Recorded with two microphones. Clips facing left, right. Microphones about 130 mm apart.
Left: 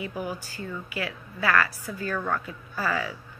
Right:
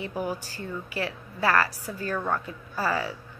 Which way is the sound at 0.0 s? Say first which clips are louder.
Right 2 dB; 35° right (ahead or behind).